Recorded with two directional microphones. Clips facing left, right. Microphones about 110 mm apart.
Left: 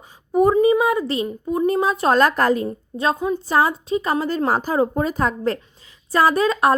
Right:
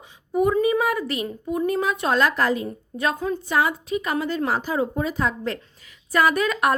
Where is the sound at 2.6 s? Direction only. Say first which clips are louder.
Left 4 dB; 30° left (ahead or behind); by 5.5 s 45° left (ahead or behind).